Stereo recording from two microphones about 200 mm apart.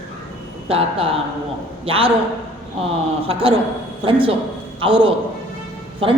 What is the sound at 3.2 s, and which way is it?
A man's voice, 25° right (ahead or behind).